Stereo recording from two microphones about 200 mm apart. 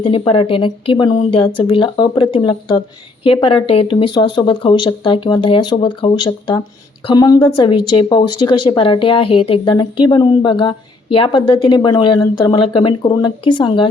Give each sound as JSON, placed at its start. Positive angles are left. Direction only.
{"t": 0.0, "sound": "speech", "side_deg": 25}